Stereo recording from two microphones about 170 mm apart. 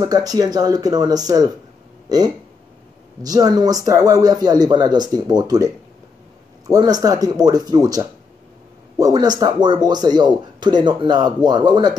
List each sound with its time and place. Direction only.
0.0 s speech: 20° right (ahead or behind)
6.7 s speech: 20° right (ahead or behind)